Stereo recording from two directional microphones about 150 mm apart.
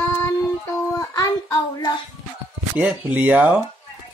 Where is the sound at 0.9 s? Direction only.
25° left (ahead or behind).